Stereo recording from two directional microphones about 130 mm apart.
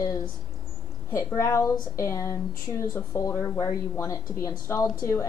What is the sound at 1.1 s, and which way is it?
Speech, 20° left (ahead or behind).